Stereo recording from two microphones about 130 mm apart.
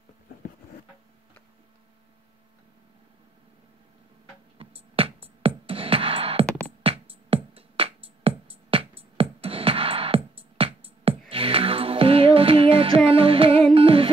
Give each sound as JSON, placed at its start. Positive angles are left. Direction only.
{"t": 5.0, "sound": "music", "side_deg": -45}